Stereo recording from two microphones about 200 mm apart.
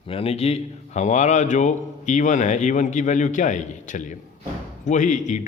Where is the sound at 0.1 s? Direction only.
30° left (ahead or behind).